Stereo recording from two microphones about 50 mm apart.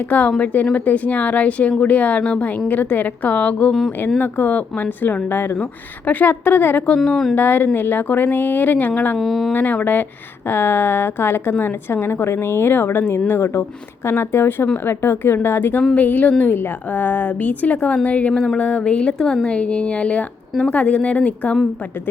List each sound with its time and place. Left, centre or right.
0.1 s a woman's voice: left
3.7 s speech: centre
4.2 s speech: left
7.0 s speech: centre
7.3 s speech: left
9.1 s speech: centre
9.5 s a woman's voice: left
16.0 s a woman's voice: left
18.3 s speech: centre
18.6 s a woman's voice: left